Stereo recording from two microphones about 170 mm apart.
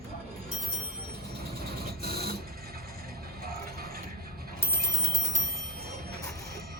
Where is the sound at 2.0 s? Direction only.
65° right (ahead or behind).